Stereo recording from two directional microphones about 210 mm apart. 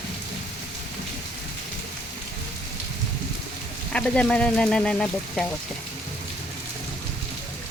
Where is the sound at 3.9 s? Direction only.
5° left (ahead or behind).